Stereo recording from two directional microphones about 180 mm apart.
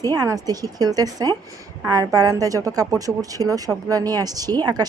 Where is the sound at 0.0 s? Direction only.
20° right (ahead or behind).